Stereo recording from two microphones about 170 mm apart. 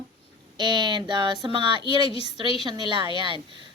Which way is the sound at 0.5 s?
25° right (ahead or behind).